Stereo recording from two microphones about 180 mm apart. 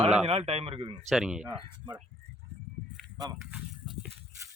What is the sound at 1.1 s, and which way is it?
Speech, 5° right (ahead or behind).